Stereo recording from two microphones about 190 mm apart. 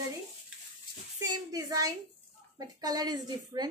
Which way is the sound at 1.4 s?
20° right (ahead or behind).